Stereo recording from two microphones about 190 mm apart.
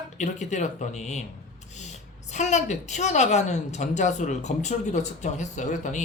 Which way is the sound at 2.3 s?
35° left (ahead or behind).